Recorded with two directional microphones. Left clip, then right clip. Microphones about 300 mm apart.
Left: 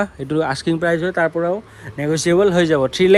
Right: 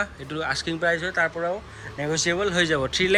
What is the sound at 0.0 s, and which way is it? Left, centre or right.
Speech, centre.